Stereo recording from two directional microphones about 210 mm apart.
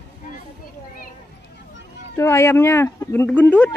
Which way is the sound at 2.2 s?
15° left (ahead or behind).